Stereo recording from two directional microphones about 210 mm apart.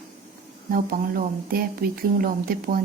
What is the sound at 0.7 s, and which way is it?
Speech, 40° right (ahead or behind).